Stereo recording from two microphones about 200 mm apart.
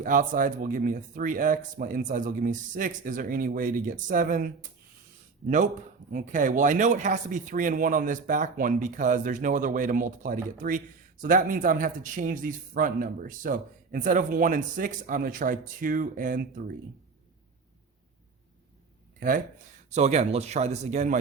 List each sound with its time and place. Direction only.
0.0 s speech: 45° right (ahead or behind)
6.1 s speech: 40° right (ahead or behind)
19.9 s speech: 35° right (ahead or behind)